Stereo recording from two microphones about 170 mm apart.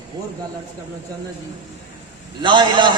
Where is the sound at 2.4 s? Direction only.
30° right (ahead or behind).